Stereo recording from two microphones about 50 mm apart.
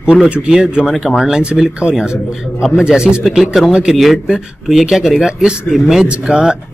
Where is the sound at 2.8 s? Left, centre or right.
Centre.